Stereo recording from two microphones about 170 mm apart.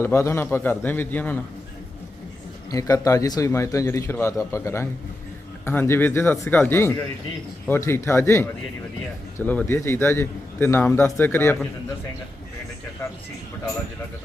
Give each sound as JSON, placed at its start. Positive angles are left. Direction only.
{"t": 0.0, "sound": "a man's voice", "side_deg": 15}
{"t": 2.6, "sound": "a man's voice", "side_deg": 20}